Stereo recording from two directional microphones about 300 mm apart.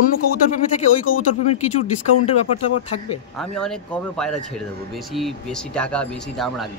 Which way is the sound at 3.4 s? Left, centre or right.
Centre.